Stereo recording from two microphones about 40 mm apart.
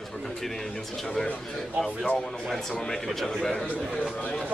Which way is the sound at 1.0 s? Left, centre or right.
Centre.